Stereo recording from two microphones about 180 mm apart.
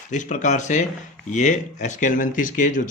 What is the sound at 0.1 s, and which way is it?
Speech, 45° left (ahead or behind).